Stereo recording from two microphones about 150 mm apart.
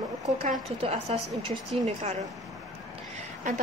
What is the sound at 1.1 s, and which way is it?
Speech, 40° right (ahead or behind).